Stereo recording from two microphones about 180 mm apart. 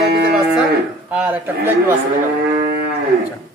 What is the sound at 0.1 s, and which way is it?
Moo, 60° right (ahead or behind).